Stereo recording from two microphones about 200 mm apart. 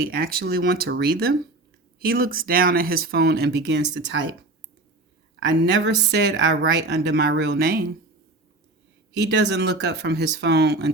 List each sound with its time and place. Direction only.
0.0 s speech: 50° right (ahead or behind); by 4.3 s 65° right (ahead or behind)
5.4 s a woman's voice: 65° right (ahead or behind)
9.3 s a woman's voice: 55° right (ahead or behind)